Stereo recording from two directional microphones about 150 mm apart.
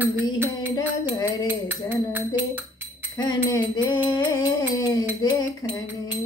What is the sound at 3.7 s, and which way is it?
Music, 30° left (ahead or behind).